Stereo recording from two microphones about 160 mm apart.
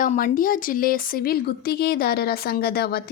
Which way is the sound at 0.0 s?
50° left (ahead or behind).